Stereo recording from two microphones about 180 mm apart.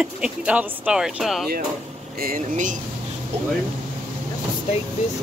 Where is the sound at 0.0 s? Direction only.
5° right (ahead or behind).